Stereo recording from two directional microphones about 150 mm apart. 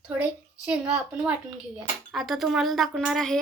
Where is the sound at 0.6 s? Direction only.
10° right (ahead or behind).